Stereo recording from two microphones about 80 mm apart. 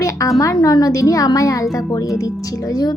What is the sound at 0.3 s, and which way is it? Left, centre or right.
A woman's voice, left.